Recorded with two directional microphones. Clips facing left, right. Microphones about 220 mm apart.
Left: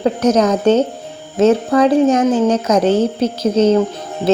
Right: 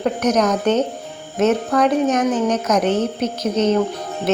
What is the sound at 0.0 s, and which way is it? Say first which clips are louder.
Speech: left 4 dB; 30° left (ahead or behind).